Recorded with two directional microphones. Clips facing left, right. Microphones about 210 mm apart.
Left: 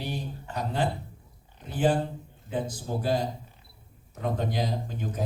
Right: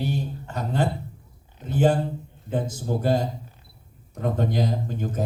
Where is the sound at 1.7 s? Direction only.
45° right (ahead or behind).